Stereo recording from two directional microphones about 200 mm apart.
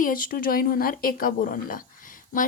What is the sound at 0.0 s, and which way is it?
A woman's voice, 45° left (ahead or behind).